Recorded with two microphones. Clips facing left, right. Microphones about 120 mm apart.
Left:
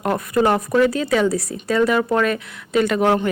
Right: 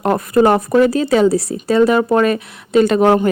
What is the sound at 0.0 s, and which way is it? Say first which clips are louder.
A woman's voice: right 5 dB; 30° right (ahead or behind).